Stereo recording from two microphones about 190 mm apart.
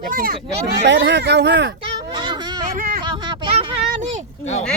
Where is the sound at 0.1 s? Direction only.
50° right (ahead or behind).